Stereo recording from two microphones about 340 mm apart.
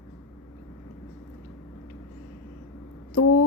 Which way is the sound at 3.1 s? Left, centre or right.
Left.